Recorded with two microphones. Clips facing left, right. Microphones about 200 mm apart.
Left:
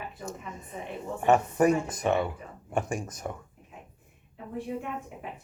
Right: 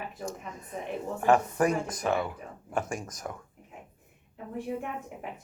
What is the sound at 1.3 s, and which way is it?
Speech, 10° left (ahead or behind).